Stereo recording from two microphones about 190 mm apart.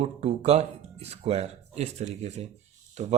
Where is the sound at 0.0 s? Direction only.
35° right (ahead or behind).